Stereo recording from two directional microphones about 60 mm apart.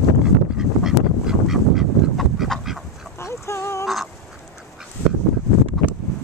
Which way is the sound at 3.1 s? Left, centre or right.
Left.